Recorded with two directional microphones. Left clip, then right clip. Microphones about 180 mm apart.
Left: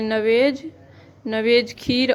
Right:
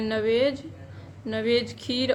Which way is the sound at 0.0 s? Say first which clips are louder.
Left 5 dB; 45° left (ahead or behind).